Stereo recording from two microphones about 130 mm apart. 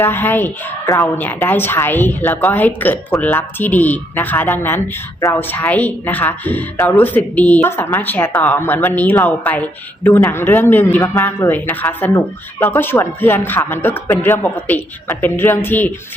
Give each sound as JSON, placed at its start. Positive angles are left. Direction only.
{"t": 0.0, "sound": "speech", "side_deg": 15}